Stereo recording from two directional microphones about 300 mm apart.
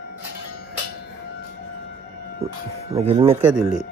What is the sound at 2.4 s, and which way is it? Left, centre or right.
Speech, centre.